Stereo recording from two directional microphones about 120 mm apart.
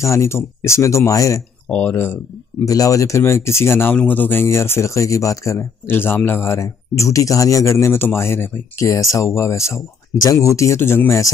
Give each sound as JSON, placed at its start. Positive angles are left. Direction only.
{"t": 0.0, "sound": "speech", "side_deg": 25}
{"t": 1.7, "sound": "speech", "side_deg": 10}
{"t": 2.6, "sound": "speech", "side_deg": 30}